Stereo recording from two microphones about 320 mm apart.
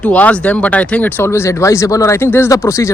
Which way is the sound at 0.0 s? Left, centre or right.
Centre.